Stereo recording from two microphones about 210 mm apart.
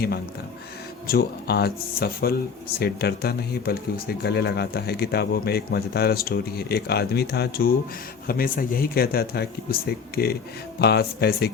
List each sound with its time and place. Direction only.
1.0 s speech: 45° left (ahead or behind)